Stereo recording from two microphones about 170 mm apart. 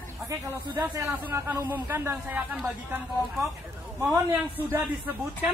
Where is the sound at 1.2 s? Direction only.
15° right (ahead or behind).